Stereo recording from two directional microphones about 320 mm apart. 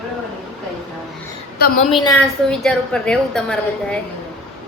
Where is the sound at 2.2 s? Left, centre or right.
Centre.